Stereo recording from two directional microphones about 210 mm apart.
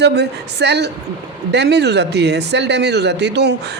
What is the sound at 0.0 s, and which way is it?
Speech, 55° right (ahead or behind).